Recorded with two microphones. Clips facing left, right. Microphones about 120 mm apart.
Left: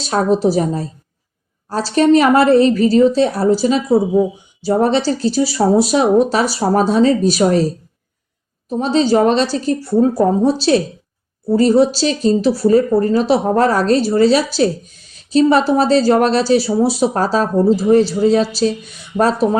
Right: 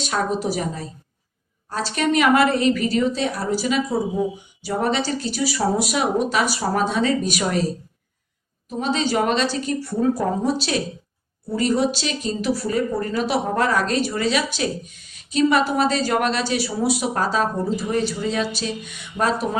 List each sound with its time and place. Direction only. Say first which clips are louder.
0.0 s speech: left 8 dB; 30° left (ahead or behind)
8.8 s speech: left 8 dB; 35° left (ahead or behind)